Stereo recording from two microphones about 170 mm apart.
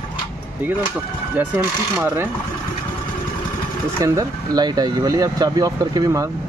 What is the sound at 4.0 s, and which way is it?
Speech, 20° right (ahead or behind).